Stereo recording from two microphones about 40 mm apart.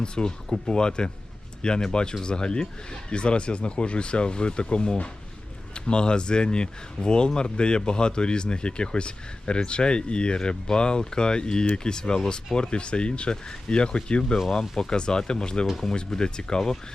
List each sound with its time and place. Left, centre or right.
0.0 s speech: left